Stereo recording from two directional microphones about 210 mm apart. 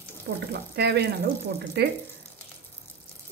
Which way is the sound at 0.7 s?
50° right (ahead or behind).